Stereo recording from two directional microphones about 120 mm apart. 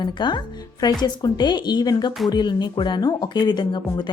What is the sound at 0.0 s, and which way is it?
A woman's voice, 40° left (ahead or behind).